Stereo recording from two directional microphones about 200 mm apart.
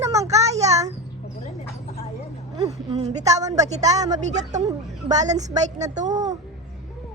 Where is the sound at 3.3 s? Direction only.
15° right (ahead or behind).